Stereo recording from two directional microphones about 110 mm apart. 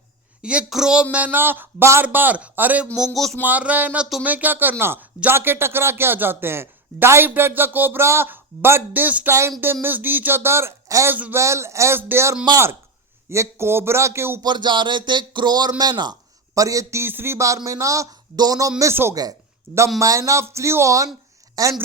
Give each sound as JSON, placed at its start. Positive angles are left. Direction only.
{"t": 0.4, "sound": "a man's voice", "side_deg": -5}
{"t": 14.4, "sound": "speech", "side_deg": -45}
{"t": 18.8, "sound": "speech", "side_deg": -25}
{"t": 19.1, "sound": "a woman's voice", "side_deg": -35}